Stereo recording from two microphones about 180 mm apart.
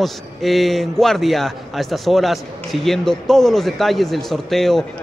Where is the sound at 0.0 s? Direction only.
Centre (ahead or behind).